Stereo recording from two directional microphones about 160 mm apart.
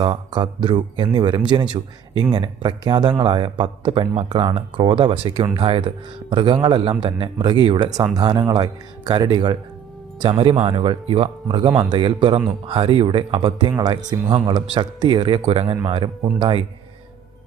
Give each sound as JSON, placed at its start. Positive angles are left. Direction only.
{"t": 0.0, "sound": "speech", "side_deg": -30}